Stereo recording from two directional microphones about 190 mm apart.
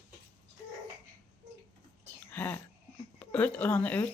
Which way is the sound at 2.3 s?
10° left (ahead or behind).